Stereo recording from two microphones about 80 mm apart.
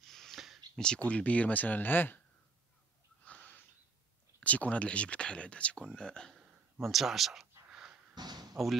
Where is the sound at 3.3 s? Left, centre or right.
Centre.